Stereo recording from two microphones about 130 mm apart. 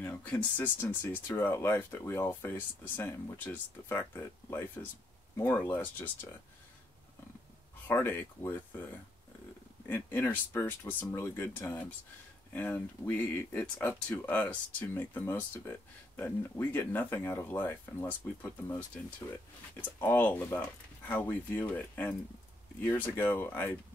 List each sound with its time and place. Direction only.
0.0 s a sound: 10° left (ahead or behind)
0.6 s speech: 15° left (ahead or behind)
7.9 s speech: 20° left (ahead or behind)
9.8 s speech: 15° left (ahead or behind)